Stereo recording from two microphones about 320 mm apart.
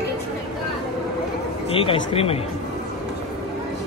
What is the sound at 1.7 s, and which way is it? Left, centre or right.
Speech, centre.